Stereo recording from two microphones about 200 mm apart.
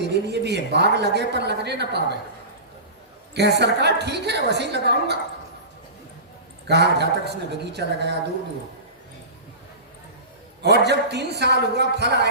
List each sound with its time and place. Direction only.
0.1 s a woman's voice: 55° right (ahead or behind)
3.3 s a woman's voice: 55° right (ahead or behind)
6.7 s a woman's voice: 55° right (ahead or behind)
10.6 s a woman's voice: 55° right (ahead or behind)